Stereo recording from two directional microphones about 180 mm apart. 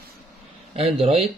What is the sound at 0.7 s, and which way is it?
Speech, 30° right (ahead or behind).